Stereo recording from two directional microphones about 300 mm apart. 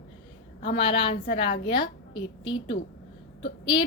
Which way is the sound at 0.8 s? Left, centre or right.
Centre.